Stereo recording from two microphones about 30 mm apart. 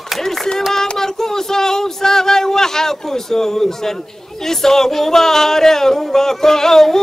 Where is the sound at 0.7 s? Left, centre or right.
Centre.